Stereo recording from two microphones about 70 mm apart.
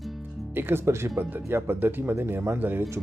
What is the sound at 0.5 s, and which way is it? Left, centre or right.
Speech, right.